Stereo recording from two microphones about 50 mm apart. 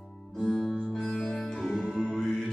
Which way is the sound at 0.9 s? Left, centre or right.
Centre.